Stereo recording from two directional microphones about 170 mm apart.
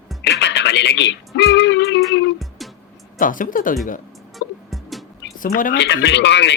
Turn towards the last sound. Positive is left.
turn(degrees=90)